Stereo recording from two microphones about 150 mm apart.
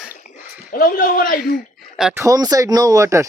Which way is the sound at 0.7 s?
70° left (ahead or behind).